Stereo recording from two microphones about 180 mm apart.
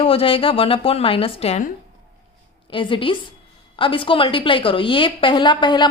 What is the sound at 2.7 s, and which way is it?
A woman's voice, 30° left (ahead or behind).